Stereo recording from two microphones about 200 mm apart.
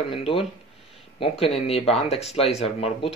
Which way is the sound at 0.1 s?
25° left (ahead or behind).